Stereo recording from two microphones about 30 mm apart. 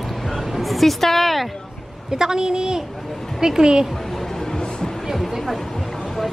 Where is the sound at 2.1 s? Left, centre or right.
Right.